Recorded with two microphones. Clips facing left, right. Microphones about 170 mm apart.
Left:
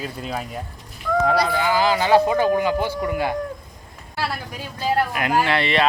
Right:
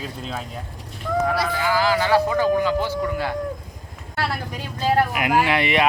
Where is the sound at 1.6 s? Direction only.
20° left (ahead or behind).